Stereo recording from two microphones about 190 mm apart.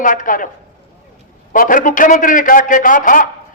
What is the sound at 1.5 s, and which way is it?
A man's voice, 45° left (ahead or behind).